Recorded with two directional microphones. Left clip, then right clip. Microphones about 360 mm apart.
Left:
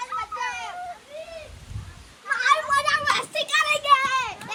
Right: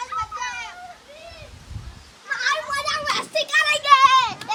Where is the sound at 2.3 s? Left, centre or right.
Centre.